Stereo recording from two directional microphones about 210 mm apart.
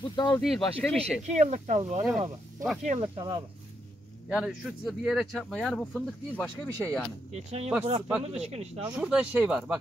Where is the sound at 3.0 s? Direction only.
20° right (ahead or behind).